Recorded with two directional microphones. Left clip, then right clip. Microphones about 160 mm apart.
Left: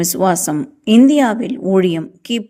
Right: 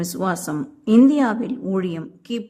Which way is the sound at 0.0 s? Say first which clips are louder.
Left 9 dB; 20° left (ahead or behind).